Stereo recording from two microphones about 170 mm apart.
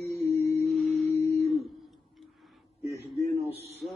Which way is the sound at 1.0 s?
40° right (ahead or behind).